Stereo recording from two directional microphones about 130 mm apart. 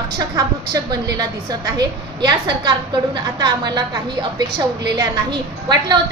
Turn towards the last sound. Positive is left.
turn(degrees=-35)  # may be behind; listen again after turning